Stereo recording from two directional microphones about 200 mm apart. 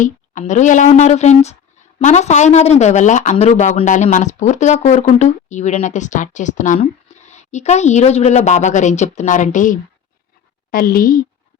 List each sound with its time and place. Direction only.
0.0 s a woman's voice: 40° left (ahead or behind)